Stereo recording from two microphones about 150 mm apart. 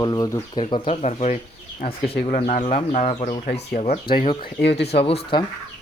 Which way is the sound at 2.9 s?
55° left (ahead or behind).